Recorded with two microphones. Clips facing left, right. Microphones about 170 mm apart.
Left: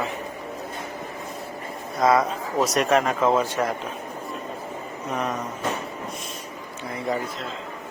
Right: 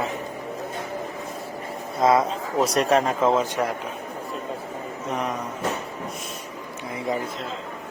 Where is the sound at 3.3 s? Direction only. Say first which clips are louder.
Even; 15° right (ahead or behind).